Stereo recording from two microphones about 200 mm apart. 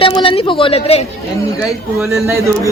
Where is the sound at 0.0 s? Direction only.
25° left (ahead or behind).